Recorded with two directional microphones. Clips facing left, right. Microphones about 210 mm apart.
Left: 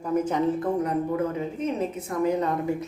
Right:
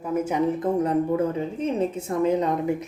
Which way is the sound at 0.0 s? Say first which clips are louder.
Even; 10° right (ahead or behind).